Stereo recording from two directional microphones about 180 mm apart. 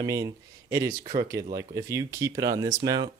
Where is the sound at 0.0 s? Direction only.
20° right (ahead or behind).